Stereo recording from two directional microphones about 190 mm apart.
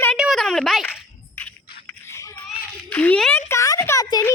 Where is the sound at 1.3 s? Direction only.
10° left (ahead or behind).